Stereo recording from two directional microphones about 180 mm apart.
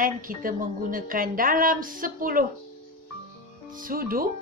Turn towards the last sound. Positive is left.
turn(degrees=-55)  # may be behind; listen again after turning